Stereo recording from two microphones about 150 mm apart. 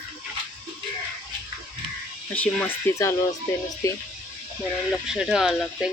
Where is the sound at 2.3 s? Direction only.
10° left (ahead or behind).